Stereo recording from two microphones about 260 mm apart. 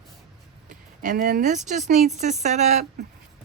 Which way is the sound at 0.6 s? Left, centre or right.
Right.